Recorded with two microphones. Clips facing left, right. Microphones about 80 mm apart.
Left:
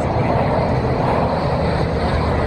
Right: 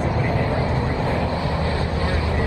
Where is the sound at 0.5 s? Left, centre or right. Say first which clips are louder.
Left 5 dB; left.